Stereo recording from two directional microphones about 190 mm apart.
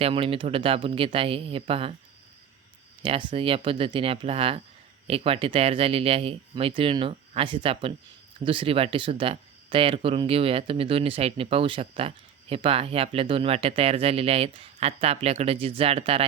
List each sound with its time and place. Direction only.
0.0 s speech: 30° right (ahead or behind)
3.0 s speech: 25° right (ahead or behind)